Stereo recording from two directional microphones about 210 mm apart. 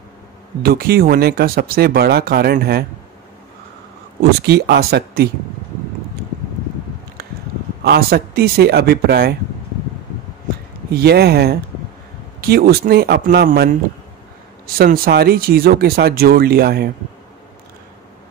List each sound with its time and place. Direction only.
0.6 s speech: 45° right (ahead or behind)
4.2 s speech: 50° right (ahead or behind)
7.8 s speech: 50° right (ahead or behind)
10.9 s speech: 50° right (ahead or behind)
14.8 s speech: 45° right (ahead or behind)